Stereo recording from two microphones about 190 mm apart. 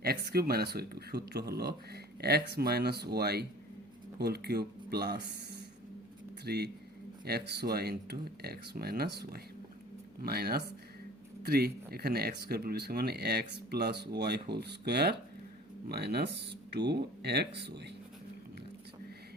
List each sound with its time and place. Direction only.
0.0 s speech: 55° right (ahead or behind)